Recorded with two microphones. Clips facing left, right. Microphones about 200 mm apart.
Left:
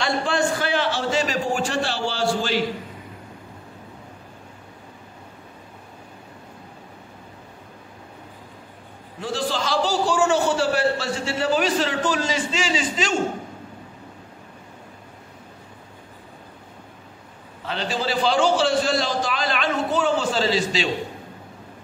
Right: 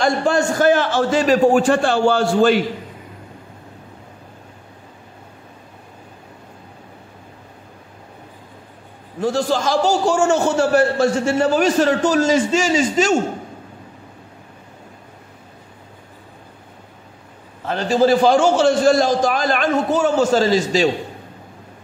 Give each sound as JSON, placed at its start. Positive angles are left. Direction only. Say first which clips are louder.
{"t": 0.0, "sound": "a man's voice", "louder": "right 5 dB", "side_deg": -45}
{"t": 9.2, "sound": "a man's voice", "louder": "right 7 dB", "side_deg": -45}
{"t": 17.6, "sound": "a man's voice", "louder": "right 11 dB", "side_deg": -45}